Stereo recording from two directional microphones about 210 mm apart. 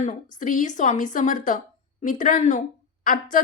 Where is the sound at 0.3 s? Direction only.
40° left (ahead or behind).